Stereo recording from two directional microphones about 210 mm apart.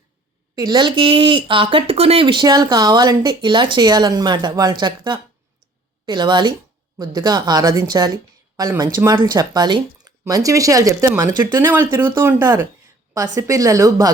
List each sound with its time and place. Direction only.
0.5 s a woman's voice: 20° right (ahead or behind)